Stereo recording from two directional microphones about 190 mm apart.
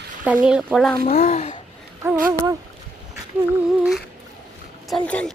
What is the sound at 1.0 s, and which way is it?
Speech, 40° left (ahead or behind).